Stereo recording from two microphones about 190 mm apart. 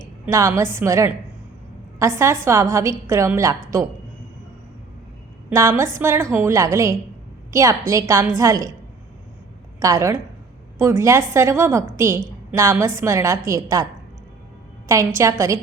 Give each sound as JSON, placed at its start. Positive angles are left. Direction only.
{"t": 0.3, "sound": "a woman's voice", "side_deg": -15}
{"t": 5.5, "sound": "a woman's voice", "side_deg": -15}
{"t": 9.8, "sound": "a woman's voice", "side_deg": -15}
{"t": 14.8, "sound": "a woman's voice", "side_deg": -15}